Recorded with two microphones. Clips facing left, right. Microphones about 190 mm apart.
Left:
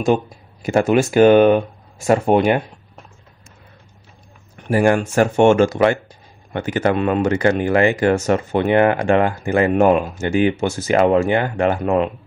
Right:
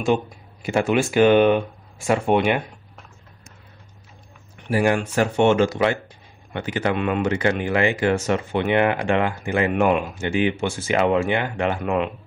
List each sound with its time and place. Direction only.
0.0 s speech: 45° left (ahead or behind)
4.6 s speech: 45° left (ahead or behind)